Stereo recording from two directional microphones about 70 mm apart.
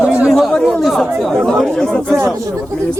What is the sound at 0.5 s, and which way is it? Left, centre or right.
Speech, centre.